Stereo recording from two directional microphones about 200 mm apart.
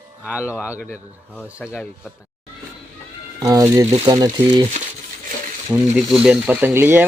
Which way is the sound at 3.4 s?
15° right (ahead or behind).